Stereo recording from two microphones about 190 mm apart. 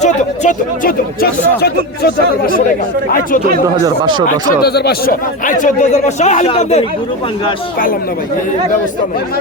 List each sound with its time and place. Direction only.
0.0 s speech: 45° left (ahead or behind)
3.8 s speech: 25° right (ahead or behind)
4.3 s speech: 55° left (ahead or behind); by 6.8 s 35° left (ahead or behind)